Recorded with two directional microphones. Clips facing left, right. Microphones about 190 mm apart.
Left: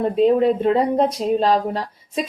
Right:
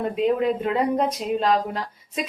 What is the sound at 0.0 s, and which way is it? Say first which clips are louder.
Speech: left 6 dB; 35° left (ahead or behind).